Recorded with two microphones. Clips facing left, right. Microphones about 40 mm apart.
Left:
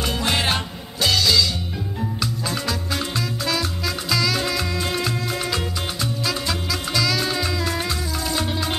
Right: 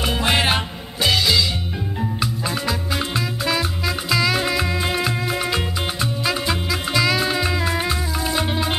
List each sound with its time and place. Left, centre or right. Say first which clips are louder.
0.0 s music: right 3 dB; right